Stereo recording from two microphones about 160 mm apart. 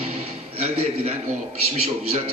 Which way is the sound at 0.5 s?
40° right (ahead or behind).